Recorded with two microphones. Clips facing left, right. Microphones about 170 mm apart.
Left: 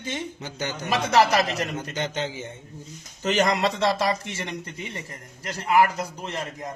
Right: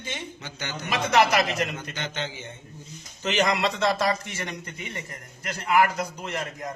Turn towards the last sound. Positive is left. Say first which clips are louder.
# even
turn(degrees=30)  # may be behind; listen again after turning